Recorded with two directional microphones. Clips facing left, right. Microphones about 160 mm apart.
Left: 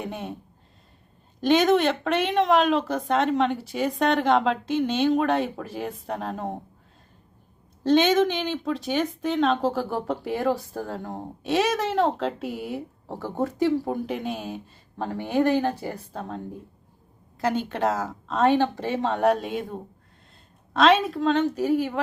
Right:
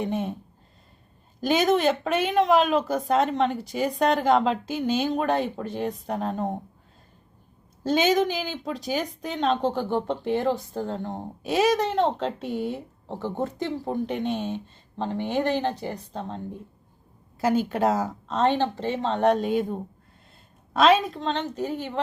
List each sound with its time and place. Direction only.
0.0 s a woman's voice: centre (ahead or behind)
1.4 s a woman's voice: centre (ahead or behind)
7.9 s a woman's voice: centre (ahead or behind)
15.7 s a woman's voice: 5° left (ahead or behind)
17.4 s a woman's voice: 5° right (ahead or behind)
20.7 s a woman's voice: centre (ahead or behind)